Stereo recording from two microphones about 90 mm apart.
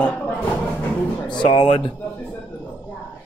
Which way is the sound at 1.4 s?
60° left (ahead or behind).